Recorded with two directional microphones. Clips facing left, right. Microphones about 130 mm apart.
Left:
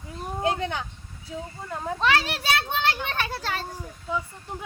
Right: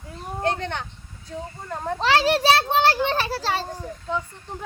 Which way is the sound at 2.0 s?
35° right (ahead or behind).